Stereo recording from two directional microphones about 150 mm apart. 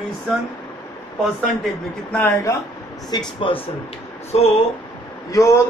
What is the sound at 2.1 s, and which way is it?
A man's voice, 20° left (ahead or behind).